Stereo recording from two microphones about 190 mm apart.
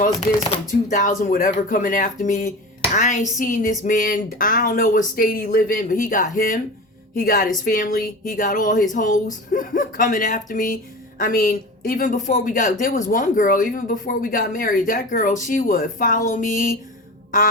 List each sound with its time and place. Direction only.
0.9 s speech: 40° left (ahead or behind)